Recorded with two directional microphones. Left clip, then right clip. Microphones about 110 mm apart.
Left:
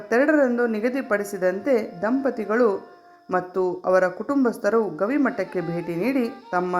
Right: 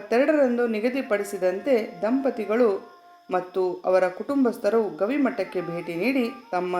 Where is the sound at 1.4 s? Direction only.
15° right (ahead or behind).